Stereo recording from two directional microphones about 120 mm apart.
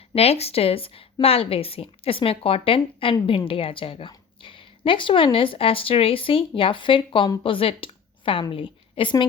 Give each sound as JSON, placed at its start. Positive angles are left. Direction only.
{"t": 0.1, "sound": "a woman's voice", "side_deg": 60}